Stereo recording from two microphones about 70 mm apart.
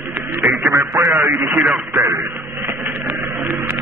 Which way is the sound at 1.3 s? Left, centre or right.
Right.